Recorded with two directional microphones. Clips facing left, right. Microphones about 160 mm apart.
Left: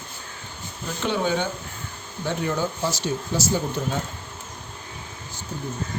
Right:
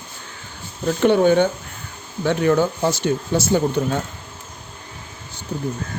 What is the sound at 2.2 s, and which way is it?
Speech, 70° right (ahead or behind).